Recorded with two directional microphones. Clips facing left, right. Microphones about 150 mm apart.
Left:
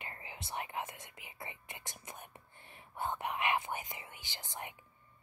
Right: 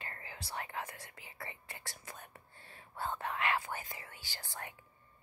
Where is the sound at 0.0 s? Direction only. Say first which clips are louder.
Even; 20° left (ahead or behind).